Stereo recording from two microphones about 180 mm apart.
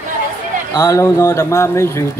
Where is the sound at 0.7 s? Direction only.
15° left (ahead or behind).